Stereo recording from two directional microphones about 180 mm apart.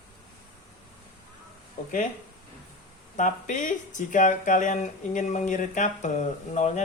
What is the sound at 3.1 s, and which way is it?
Speech, 45° left (ahead or behind).